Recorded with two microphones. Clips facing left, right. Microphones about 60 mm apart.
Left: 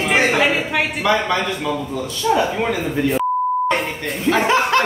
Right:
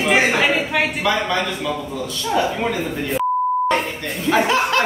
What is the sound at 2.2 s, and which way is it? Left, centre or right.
Speech, centre.